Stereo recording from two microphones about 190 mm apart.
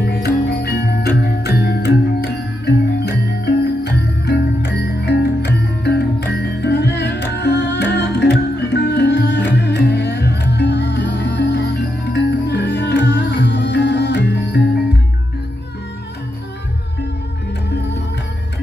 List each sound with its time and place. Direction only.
0.0 s music: 55° left (ahead or behind)